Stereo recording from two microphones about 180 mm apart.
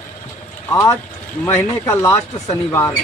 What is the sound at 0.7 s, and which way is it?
Speech, 15° left (ahead or behind).